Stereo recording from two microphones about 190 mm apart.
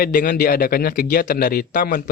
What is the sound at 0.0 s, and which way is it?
A man's voice, 50° left (ahead or behind).